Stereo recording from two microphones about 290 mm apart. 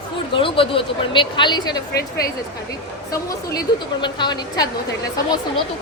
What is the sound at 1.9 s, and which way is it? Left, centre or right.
Speech, left.